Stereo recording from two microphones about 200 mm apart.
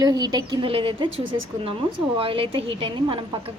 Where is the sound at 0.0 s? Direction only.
20° right (ahead or behind).